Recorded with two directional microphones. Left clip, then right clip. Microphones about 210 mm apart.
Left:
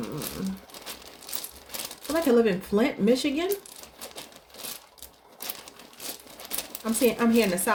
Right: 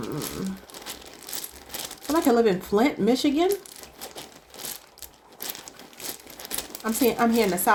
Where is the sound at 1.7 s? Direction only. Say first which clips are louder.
Right 3 dB; 25° right (ahead or behind).